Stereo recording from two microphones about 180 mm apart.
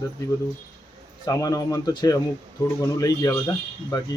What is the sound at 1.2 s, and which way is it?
Speech, 20° left (ahead or behind).